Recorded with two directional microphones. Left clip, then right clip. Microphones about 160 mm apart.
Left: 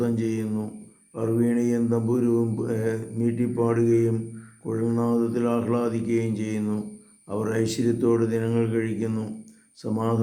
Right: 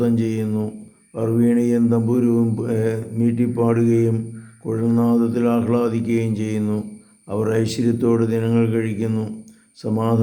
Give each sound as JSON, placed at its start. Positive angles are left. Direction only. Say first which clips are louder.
{"t": 0.0, "sound": "mantra", "louder": "right 5 dB", "side_deg": -20}
{"t": 9.8, "sound": "speech", "louder": "right 5 dB", "side_deg": -15}